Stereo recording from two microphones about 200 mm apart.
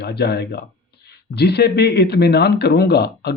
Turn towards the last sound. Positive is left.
turn(degrees=55)  # may be behind; listen again after turning